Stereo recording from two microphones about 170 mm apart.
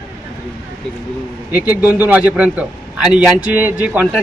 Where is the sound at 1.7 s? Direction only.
10° right (ahead or behind).